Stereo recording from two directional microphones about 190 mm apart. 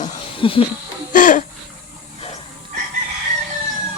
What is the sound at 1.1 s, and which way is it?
Laughter, 45° left (ahead or behind).